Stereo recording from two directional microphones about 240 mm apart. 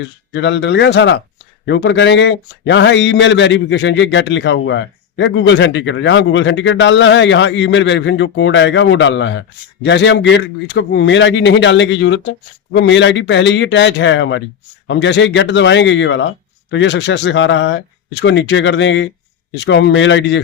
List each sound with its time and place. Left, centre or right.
0.0 s a man's voice: left